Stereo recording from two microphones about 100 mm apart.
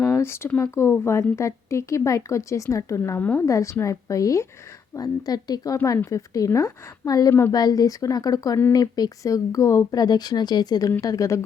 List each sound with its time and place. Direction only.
0.0 s speech: 25° left (ahead or behind)
3.4 s speech: 30° left (ahead or behind)
7.5 s speech: 40° left (ahead or behind)